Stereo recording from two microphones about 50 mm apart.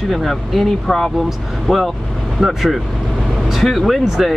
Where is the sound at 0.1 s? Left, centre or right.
Centre.